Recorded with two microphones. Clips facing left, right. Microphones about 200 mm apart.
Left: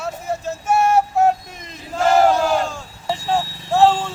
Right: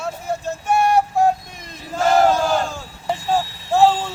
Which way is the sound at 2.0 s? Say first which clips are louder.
Left 1 dB; centre (ahead or behind).